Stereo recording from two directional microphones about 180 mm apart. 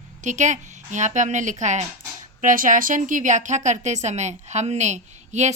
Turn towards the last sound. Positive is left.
turn(degrees=-40)  # may be behind; listen again after turning